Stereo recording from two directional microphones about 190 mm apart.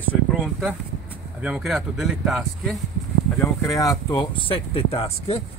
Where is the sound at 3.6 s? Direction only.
20° left (ahead or behind).